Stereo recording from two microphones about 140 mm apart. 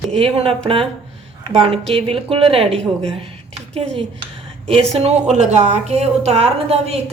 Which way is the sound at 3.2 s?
40° right (ahead or behind).